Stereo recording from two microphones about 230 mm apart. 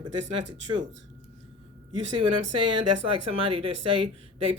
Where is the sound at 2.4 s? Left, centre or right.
Right.